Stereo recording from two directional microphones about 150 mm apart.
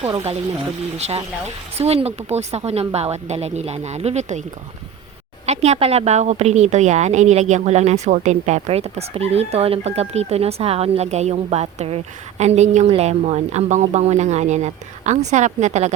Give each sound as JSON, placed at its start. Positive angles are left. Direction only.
{"t": 0.9, "sound": "speech", "side_deg": -45}
{"t": 5.5, "sound": "speech", "side_deg": -45}